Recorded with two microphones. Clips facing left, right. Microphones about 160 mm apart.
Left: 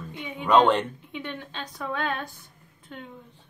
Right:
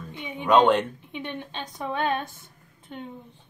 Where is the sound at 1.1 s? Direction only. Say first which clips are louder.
Right 1 dB; 20° right (ahead or behind).